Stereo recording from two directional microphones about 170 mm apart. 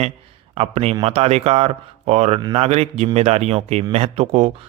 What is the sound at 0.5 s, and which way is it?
A man's voice, 35° right (ahead or behind).